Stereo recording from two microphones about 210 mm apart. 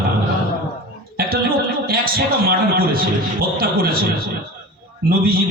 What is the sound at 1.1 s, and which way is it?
A man's voice, 45° right (ahead or behind).